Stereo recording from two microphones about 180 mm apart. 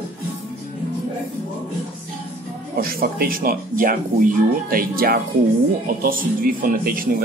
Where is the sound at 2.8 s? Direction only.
55° right (ahead or behind).